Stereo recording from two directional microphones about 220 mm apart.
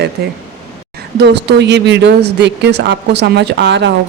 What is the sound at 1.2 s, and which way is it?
A woman's voice, 50° right (ahead or behind).